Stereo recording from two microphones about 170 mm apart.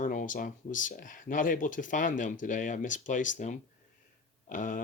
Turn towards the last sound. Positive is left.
turn(degrees=50)  # may be behind; listen again after turning